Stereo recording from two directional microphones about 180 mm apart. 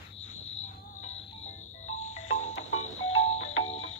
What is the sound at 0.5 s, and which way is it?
Music, 40° left (ahead or behind).